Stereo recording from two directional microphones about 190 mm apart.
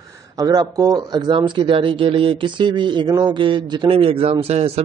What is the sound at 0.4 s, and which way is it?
Speech, 20° right (ahead or behind).